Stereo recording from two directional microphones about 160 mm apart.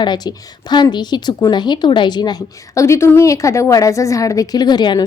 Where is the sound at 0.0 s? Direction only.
25° left (ahead or behind).